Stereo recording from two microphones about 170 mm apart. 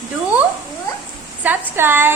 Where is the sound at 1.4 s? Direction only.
10° right (ahead or behind).